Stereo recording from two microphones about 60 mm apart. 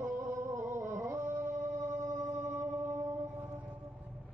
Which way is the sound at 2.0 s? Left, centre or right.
Right.